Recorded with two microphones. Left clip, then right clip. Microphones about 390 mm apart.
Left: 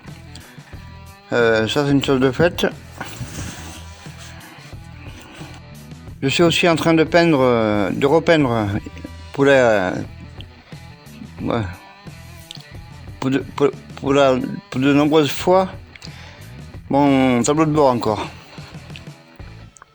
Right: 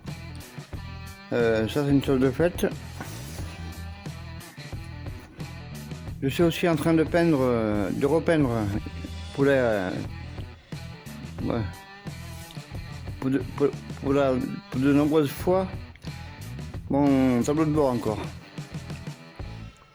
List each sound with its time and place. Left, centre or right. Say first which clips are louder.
1.3 s speech: left 8 dB; right
6.2 s speech: left 9 dB; right
11.4 s speech: left 8 dB; right
13.1 s speech: left 7 dB; right
16.9 s speech: left 7 dB; right